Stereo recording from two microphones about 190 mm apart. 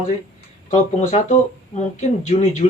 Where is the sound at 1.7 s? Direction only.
40° left (ahead or behind).